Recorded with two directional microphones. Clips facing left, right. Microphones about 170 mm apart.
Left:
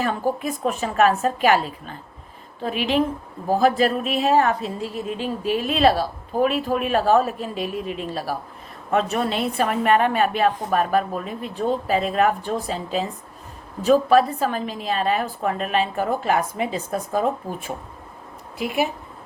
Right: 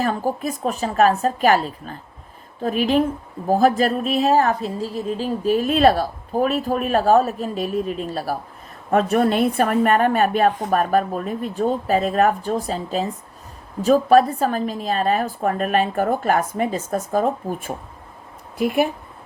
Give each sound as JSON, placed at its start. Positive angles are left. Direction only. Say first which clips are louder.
{"t": 0.0, "sound": "a woman's voice", "louder": "right 1 dB", "side_deg": -40}